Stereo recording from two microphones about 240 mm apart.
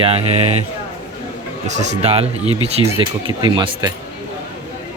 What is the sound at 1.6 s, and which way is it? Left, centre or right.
Speech, right.